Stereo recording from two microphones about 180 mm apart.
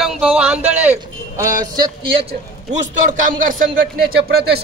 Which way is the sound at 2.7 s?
45° right (ahead or behind).